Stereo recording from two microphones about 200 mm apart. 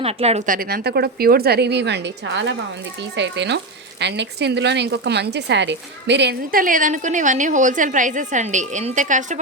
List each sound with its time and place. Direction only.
0.0 s a woman's voice: 30° right (ahead or behind)